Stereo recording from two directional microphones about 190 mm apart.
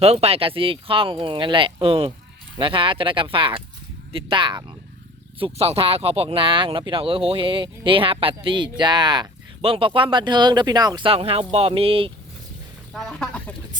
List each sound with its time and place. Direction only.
0.0 s speech: 30° right (ahead or behind)
12.9 s speech: 5° left (ahead or behind)